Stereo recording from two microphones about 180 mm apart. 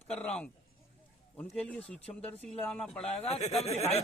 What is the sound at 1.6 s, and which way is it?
Speech, 5° left (ahead or behind).